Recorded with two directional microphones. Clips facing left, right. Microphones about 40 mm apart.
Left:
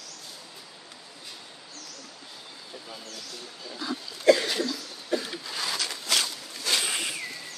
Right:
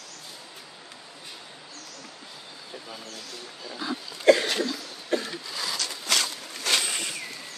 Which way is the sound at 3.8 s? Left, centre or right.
Centre.